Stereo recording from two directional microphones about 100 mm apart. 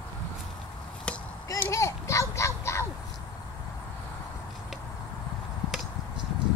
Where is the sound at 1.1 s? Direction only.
10° left (ahead or behind).